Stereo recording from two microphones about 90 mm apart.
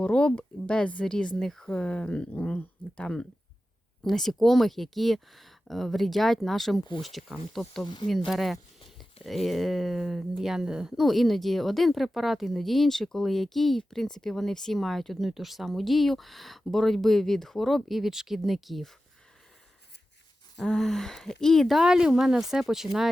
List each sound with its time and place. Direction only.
0.0 s speech: 10° left (ahead or behind)
7.9 s speech: 55° left (ahead or behind)
8.3 s speech: centre (ahead or behind)
20.6 s speech: 5° left (ahead or behind)